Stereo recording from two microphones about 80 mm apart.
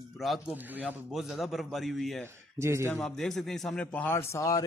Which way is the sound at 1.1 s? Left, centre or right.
Centre.